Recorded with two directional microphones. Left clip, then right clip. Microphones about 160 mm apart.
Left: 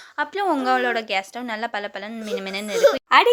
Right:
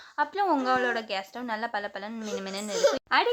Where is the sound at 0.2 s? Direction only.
25° left (ahead or behind).